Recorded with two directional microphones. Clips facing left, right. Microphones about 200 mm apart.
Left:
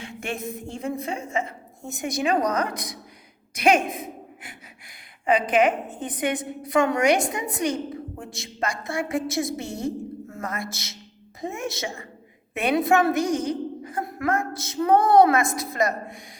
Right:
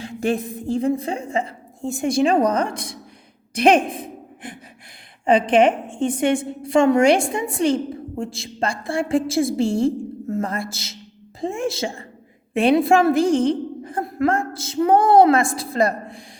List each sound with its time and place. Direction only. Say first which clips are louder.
0.0 s a woman's voice: right 8 dB; 35° right (ahead or behind)